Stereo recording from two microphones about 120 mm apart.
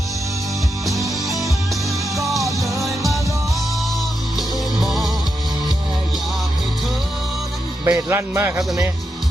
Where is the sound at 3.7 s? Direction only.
Centre (ahead or behind).